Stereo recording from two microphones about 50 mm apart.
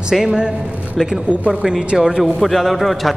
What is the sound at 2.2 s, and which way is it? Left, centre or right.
Speech, centre.